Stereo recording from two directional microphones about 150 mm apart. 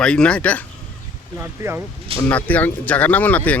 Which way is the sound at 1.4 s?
15° right (ahead or behind).